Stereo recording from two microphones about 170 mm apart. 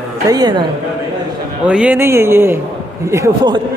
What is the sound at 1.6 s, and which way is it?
A man's voice, 5° right (ahead or behind).